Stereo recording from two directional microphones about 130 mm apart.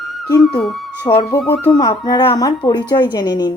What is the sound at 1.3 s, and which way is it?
Music, 15° left (ahead or behind).